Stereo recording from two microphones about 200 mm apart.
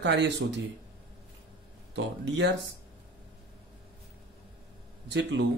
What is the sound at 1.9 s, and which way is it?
Speech, 65° right (ahead or behind).